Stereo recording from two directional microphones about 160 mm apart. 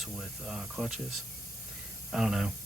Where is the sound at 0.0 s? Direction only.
Centre (ahead or behind).